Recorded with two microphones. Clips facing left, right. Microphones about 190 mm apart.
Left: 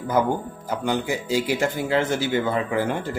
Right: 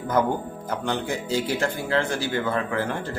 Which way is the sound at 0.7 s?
10° left (ahead or behind).